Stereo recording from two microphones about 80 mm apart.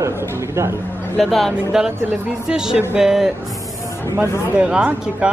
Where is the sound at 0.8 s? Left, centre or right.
Left.